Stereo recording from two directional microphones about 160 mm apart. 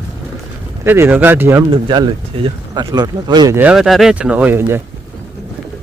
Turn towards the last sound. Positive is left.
turn(degrees=-15)  # may be behind; listen again after turning